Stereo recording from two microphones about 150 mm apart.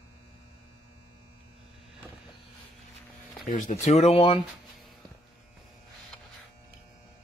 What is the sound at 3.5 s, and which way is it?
Speech, 60° left (ahead or behind).